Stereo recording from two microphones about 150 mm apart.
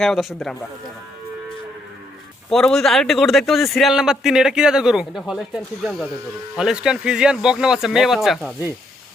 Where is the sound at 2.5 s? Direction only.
5° left (ahead or behind).